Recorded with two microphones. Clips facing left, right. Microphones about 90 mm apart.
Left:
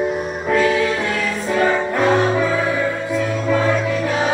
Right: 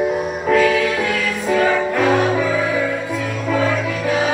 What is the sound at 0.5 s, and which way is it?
Music, 25° left (ahead or behind).